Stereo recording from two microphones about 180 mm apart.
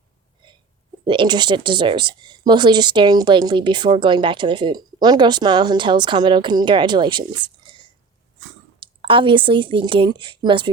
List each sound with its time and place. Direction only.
1.0 s speech: 25° right (ahead or behind)